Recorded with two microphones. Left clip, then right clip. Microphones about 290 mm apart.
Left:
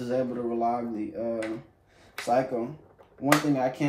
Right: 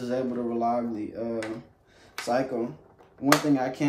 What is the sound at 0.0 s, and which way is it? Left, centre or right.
Speech, centre.